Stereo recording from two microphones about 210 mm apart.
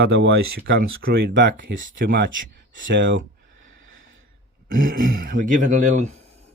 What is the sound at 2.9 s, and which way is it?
Speech, 60° right (ahead or behind).